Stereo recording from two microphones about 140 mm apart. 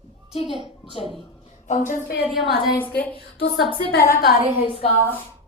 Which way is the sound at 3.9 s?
90° left.